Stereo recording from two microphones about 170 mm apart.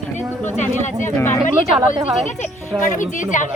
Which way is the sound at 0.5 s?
45° left (ahead or behind).